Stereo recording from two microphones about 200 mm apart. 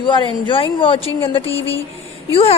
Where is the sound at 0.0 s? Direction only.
25° left (ahead or behind).